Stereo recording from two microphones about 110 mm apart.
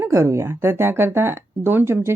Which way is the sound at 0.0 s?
25° right (ahead or behind).